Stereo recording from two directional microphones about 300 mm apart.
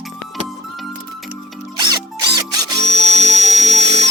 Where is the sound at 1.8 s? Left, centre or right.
Centre.